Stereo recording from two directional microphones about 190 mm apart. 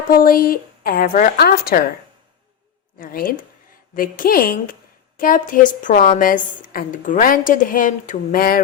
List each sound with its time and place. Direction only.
0.1 s a woman's voice: 50° left (ahead or behind)
3.0 s a woman's voice: 50° left (ahead or behind)